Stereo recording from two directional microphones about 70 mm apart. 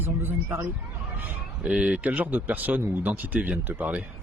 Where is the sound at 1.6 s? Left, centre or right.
Centre.